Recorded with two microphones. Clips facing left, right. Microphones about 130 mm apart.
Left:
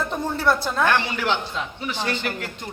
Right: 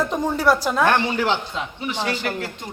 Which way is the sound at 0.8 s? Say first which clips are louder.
Right 2 dB; 35° right (ahead or behind).